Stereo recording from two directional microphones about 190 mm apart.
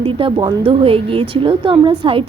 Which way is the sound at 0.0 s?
25° right (ahead or behind).